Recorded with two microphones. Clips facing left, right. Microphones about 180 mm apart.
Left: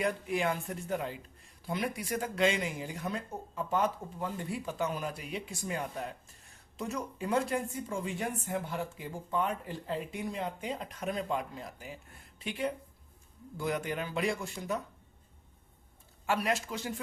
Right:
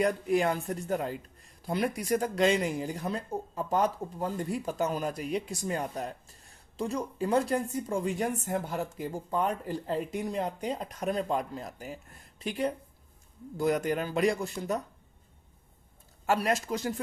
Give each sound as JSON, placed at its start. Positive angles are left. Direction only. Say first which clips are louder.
{"t": 0.0, "sound": "speech", "louder": "right 5 dB", "side_deg": -40}
{"t": 16.2, "sound": "speech", "louder": "right 3 dB", "side_deg": -40}